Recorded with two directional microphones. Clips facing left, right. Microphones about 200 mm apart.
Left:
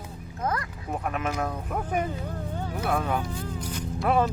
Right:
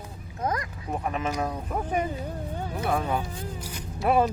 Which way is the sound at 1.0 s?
Centre (ahead or behind).